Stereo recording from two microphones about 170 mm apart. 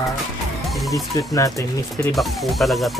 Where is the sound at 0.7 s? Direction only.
Centre (ahead or behind).